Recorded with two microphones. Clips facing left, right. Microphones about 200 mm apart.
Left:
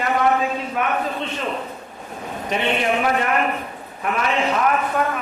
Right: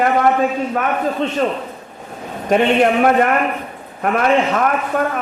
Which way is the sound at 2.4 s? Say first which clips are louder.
Right 8 dB; 55° right (ahead or behind).